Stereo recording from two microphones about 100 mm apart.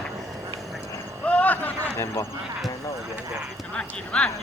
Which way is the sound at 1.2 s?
15° left (ahead or behind).